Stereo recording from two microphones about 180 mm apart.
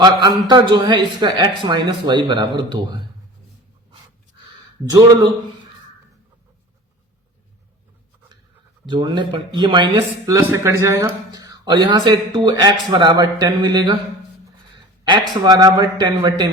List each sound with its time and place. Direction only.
0.0 s speech: 25° right (ahead or behind)
8.9 s speech: 25° right (ahead or behind)
15.0 s speech: 25° right (ahead or behind)